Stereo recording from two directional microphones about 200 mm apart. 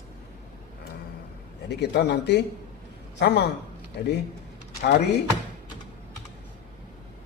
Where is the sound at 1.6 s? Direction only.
55° left (ahead or behind).